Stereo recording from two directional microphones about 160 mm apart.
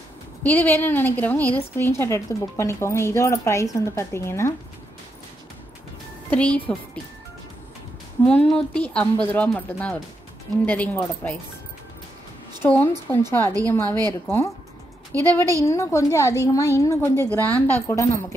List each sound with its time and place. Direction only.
0.4 s a woman's voice: 10° left (ahead or behind)
6.3 s a woman's voice: 10° left (ahead or behind)
8.3 s a woman's voice: 10° left (ahead or behind)
12.6 s a woman's voice: 15° left (ahead or behind)
15.1 s a woman's voice: 10° left (ahead or behind)